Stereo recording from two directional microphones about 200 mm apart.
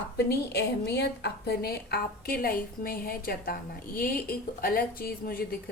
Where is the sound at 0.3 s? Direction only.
55° left (ahead or behind).